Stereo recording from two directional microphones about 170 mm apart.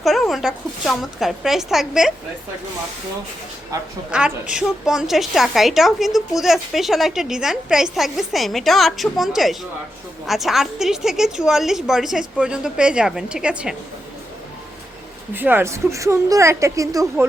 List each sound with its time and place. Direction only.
0.0 s a woman's voice: centre (ahead or behind)
4.1 s a woman's voice: 5° right (ahead or behind)
15.3 s a woman's voice: 10° right (ahead or behind)